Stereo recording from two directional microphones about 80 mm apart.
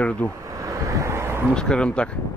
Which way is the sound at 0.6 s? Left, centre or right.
Right.